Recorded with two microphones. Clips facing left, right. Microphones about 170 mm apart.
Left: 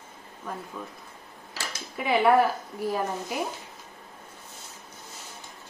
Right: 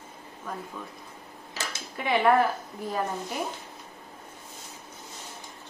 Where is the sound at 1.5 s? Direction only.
20° right (ahead or behind).